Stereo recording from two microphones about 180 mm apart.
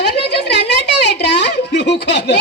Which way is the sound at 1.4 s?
70° left (ahead or behind).